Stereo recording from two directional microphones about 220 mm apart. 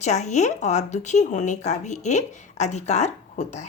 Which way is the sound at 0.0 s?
30° left (ahead or behind).